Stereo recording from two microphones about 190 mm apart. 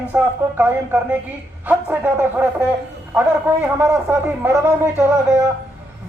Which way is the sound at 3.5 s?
10° right (ahead or behind).